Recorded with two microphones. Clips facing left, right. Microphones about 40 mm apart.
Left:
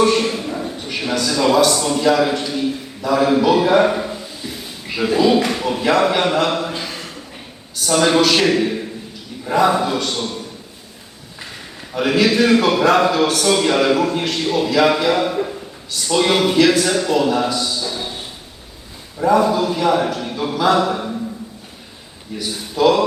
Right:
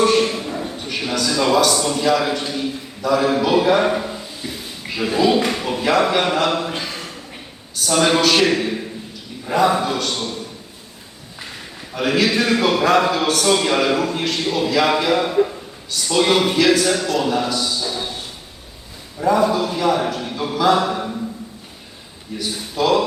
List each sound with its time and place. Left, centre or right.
0.0 s a sound: centre
0.9 s a man's voice: centre
2.5 s a sound: centre
3.2 s a man's voice: centre
6.7 s speech: right
7.9 s a man's voice: centre
11.9 s a man's voice: centre
17.5 s a sound: centre
19.2 s a man's voice: centre
22.4 s a man's voice: centre